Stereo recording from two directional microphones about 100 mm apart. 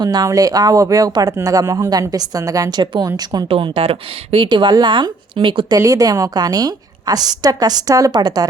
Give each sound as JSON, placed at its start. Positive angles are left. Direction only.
{"t": 0.0, "sound": "speech", "side_deg": -40}
{"t": 3.5, "sound": "speech", "side_deg": -65}
{"t": 4.4, "sound": "speech", "side_deg": -50}